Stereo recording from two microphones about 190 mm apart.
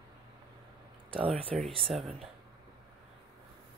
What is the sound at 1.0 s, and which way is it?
Speech, 30° right (ahead or behind).